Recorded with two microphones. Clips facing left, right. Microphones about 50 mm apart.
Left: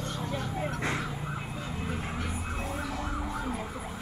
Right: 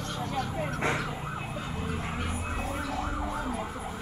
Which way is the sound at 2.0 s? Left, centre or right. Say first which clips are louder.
Right 1 dB; right.